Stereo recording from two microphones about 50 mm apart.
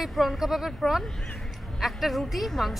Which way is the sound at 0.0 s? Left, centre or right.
Centre.